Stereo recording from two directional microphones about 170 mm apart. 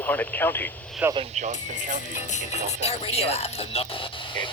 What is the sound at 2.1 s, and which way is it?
Music, 45° left (ahead or behind).